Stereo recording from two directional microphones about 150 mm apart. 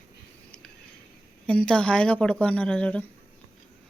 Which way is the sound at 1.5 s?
5° left (ahead or behind).